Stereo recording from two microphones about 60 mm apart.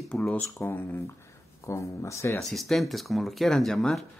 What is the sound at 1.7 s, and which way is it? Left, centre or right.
Speech, left.